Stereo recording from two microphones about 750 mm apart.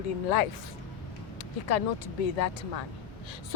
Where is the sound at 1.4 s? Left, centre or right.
Left.